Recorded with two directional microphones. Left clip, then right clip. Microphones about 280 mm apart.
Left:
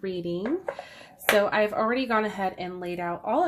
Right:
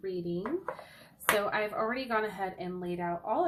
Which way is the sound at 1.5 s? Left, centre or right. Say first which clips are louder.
Left 7 dB; left.